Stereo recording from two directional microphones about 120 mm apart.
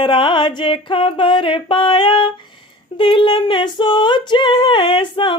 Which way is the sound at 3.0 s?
45° left (ahead or behind).